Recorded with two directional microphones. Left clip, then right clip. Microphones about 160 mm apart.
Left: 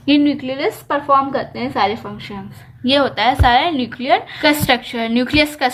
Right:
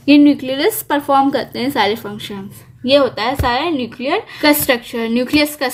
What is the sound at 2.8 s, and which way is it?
A woman's voice, 10° right (ahead or behind).